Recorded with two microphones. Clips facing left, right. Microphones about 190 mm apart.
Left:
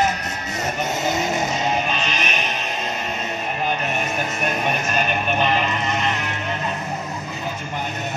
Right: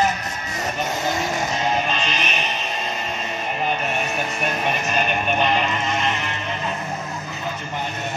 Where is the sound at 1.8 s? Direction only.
10° left (ahead or behind).